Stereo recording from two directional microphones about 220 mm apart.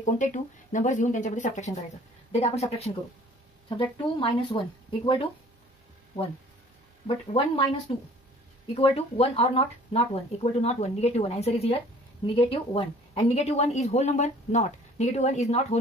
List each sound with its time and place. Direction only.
0.0 s a woman's voice: 35° left (ahead or behind)
7.1 s speech: 25° left (ahead or behind)
8.7 s a woman's voice: 25° left (ahead or behind)